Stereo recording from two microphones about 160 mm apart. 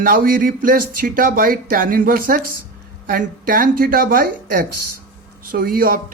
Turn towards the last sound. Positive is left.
turn(degrees=-65)  # may be behind; listen again after turning